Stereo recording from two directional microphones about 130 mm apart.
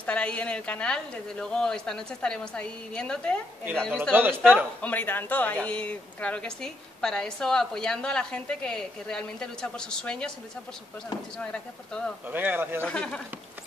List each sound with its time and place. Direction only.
0.0 s a woman's voice: 10° left (ahead or behind)
4.1 s a man's voice: 15° right (ahead or behind)
4.8 s speech: 15° left (ahead or behind)
11.3 s speech: 5° left (ahead or behind)
12.3 s a man's voice: 15° right (ahead or behind)
12.8 s a woman's voice: 5° left (ahead or behind)